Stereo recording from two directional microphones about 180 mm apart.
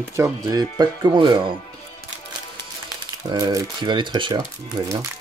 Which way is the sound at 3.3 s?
20° right (ahead or behind).